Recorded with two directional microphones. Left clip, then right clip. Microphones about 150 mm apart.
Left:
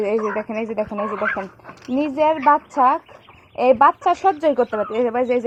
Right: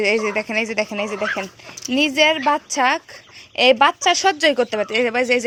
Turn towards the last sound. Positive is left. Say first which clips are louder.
# right 1 dB
turn(degrees=-30)  # may be behind; listen again after turning